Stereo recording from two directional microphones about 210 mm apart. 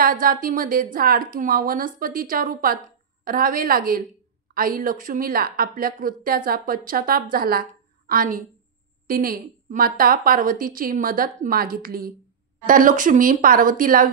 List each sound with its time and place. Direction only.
0.0 s a woman's voice: 40° right (ahead or behind)